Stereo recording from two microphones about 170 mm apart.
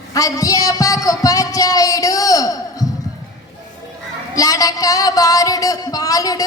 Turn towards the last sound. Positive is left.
turn(degrees=20)  # may be behind; listen again after turning